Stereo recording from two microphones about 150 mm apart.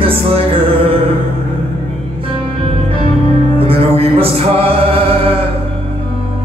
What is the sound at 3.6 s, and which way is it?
Music, 40° right (ahead or behind).